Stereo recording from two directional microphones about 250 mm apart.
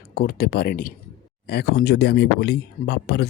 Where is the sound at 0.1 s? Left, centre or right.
Left.